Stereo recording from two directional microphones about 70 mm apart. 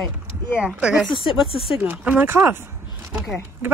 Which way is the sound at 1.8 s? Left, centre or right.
Right.